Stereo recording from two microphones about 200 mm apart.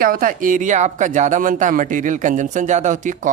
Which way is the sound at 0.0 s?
45° right (ahead or behind).